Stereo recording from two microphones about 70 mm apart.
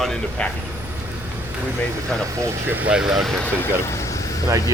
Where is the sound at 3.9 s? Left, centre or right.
Left.